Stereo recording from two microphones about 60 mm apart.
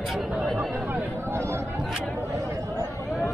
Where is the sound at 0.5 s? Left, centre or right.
Right.